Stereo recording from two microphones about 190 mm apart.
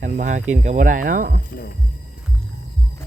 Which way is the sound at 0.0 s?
40° right (ahead or behind).